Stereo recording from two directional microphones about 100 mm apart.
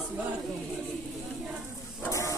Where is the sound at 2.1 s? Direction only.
30° left (ahead or behind).